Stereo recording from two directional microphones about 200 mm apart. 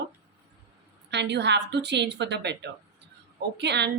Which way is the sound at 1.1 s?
60° right (ahead or behind).